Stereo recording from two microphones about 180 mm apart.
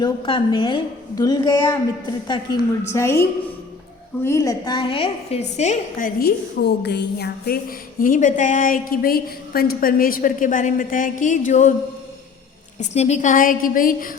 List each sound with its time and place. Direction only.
0.0 s a woman's voice: 25° left (ahead or behind)
6.1 s a woman's voice: 60° left (ahead or behind)
8.0 s a woman's voice: 45° left (ahead or behind)
12.8 s a woman's voice: 40° left (ahead or behind)